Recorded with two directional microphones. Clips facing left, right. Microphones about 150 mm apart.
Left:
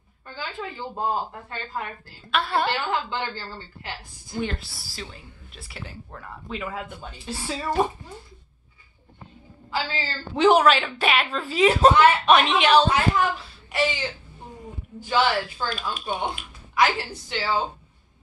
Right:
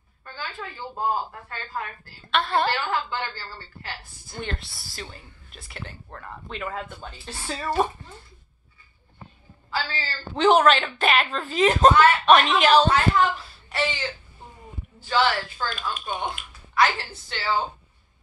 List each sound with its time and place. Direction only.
0.4 s speech: 20° left (ahead or behind)
2.3 s speech: 5° left (ahead or behind)
2.7 s speech: 20° left (ahead or behind)
4.4 s a woman's voice: 5° left (ahead or behind)
9.7 s a woman's voice: 15° left (ahead or behind); by 12.9 s centre (ahead or behind)
12.9 s speech: 10° left (ahead or behind)